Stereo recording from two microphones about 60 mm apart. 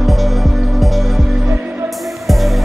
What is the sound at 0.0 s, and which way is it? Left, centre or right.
Music, centre.